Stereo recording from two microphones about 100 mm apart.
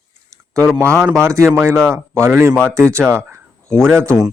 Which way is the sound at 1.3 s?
30° right (ahead or behind).